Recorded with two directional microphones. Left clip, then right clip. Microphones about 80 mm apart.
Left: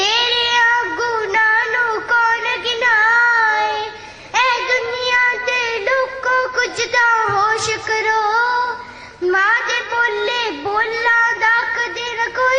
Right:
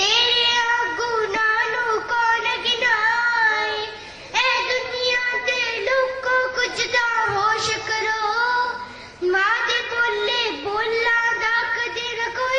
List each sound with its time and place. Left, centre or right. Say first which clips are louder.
0.0 s music: left 2 dB; left
4.4 s child singing: left 4 dB; left
9.3 s a sound: left 4 dB; left